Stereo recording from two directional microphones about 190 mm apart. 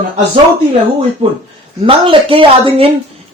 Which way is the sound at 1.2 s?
35° right (ahead or behind).